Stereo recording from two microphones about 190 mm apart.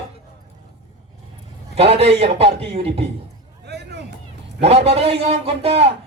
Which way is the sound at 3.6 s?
60° right (ahead or behind).